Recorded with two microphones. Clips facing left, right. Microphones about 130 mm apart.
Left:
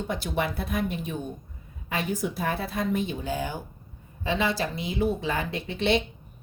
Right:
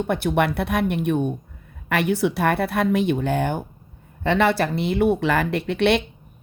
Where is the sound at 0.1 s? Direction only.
60° right (ahead or behind).